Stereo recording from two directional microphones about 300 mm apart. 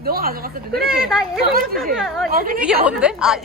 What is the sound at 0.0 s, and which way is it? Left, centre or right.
Speech, right.